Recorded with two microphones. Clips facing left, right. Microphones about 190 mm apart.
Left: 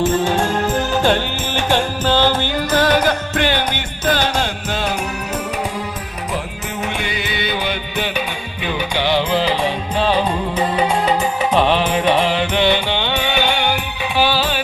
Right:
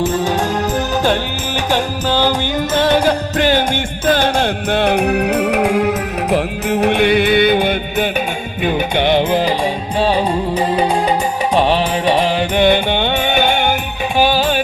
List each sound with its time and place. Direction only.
0.2 s music: 15° right (ahead or behind)
2.7 s music: 25° right (ahead or behind)
4.1 s music: 55° right (ahead or behind)
10.0 s music: 10° right (ahead or behind)
11.5 s music: 10° right (ahead or behind)
12.1 s music: 40° right (ahead or behind)